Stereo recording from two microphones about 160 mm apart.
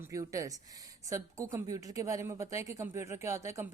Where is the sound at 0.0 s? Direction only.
20° right (ahead or behind).